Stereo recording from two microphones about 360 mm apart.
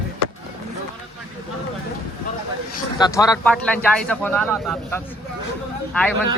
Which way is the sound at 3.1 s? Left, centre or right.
Centre.